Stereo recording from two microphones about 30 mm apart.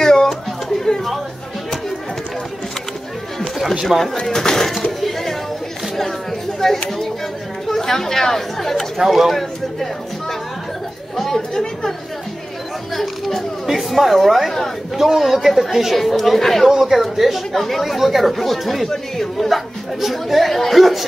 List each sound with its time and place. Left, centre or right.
0.0 s chatter: left
3.9 s speech: right
4.3 s speech: centre
6.6 s speech: centre
8.9 s speech: centre
11.3 s speech: centre
12.9 s a man's voice: centre
15.9 s speech: centre
16.6 s a man's voice: centre
20.5 s speech: centre